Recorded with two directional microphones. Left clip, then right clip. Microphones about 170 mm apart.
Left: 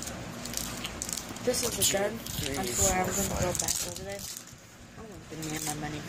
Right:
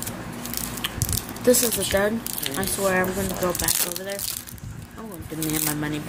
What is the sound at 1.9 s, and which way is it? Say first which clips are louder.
Speech: right 8 dB; 70° right (ahead or behind).